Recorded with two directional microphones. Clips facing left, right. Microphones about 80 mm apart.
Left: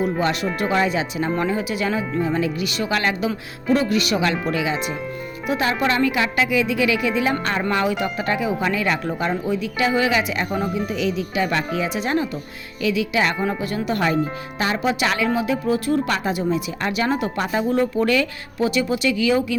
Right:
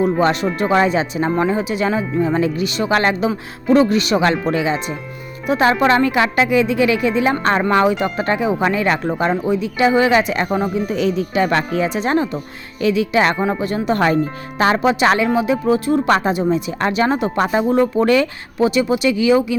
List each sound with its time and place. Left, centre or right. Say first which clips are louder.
0.0 s speech: right 5 dB; right
9.4 s speech: right 5 dB; right
10.1 s speech: right 6 dB; right; by 19.5 s centre